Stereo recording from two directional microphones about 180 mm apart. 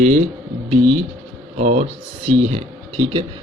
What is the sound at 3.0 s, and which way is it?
Speech, 25° right (ahead or behind).